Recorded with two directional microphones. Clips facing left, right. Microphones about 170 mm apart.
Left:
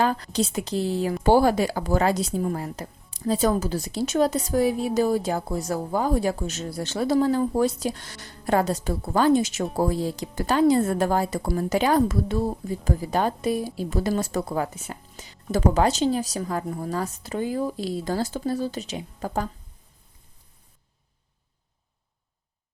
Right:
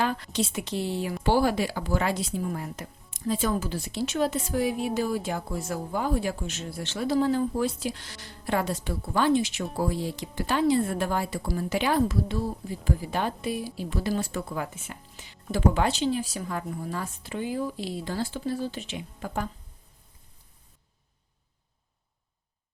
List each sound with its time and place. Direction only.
0.0 s a woman's voice: 40° left (ahead or behind)